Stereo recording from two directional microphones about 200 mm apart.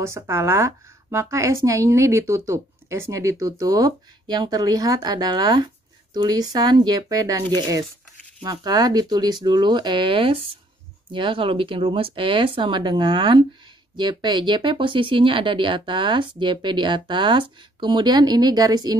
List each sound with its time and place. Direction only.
0.0 s speech: 15° right (ahead or behind)